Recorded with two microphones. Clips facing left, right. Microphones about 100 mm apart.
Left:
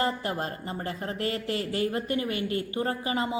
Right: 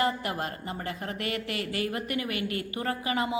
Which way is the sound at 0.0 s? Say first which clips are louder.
Even; 30° left (ahead or behind).